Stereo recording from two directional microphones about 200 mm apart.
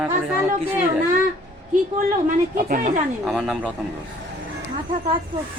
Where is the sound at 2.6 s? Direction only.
45° right (ahead or behind).